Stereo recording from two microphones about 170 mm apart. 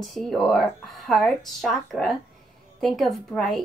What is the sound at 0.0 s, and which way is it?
Speech, centre (ahead or behind).